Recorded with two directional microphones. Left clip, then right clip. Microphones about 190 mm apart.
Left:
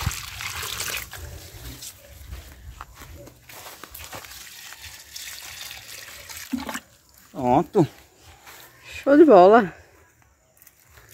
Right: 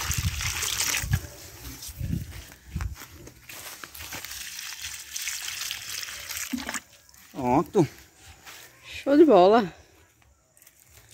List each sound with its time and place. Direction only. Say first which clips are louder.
0.0 s trickle: right 1 dB; centre (ahead or behind)
5.7 s water: right 5 dB; 5° left (ahead or behind)
7.3 s speech: left 3 dB; 15° left (ahead or behind)